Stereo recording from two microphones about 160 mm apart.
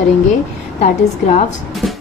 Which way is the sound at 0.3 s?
45° left (ahead or behind).